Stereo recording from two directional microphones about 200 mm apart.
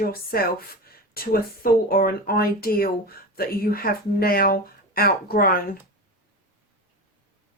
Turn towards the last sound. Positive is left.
turn(degrees=45)  # may be behind; listen again after turning